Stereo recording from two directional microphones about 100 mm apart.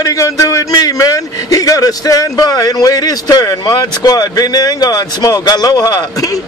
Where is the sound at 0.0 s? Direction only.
35° left (ahead or behind).